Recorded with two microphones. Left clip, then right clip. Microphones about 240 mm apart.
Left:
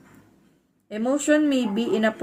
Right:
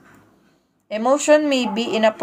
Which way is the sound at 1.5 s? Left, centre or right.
Centre.